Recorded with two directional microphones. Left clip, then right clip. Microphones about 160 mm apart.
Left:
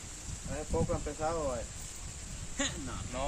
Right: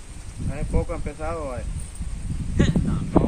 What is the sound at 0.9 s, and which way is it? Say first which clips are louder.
Speech: right 4 dB; 20° right (ahead or behind).